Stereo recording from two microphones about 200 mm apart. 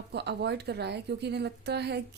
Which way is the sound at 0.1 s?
55° right (ahead or behind).